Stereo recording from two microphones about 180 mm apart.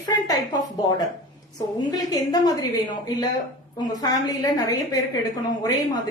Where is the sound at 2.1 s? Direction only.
20° left (ahead or behind).